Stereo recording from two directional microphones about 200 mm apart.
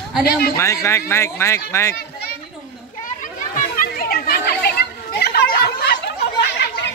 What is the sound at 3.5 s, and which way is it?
Children playing, 45° left (ahead or behind).